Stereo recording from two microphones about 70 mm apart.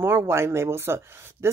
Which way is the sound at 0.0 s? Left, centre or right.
Right.